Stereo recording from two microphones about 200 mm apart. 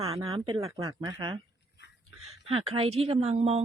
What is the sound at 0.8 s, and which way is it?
Speech, 15° right (ahead or behind).